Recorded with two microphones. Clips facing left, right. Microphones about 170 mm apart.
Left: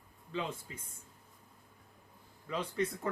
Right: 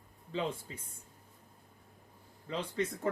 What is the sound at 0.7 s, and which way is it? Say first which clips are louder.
Speech: right 1 dB; 30° right (ahead or behind).